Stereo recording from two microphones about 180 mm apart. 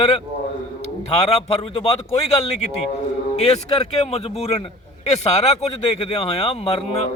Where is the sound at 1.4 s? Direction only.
35° left (ahead or behind).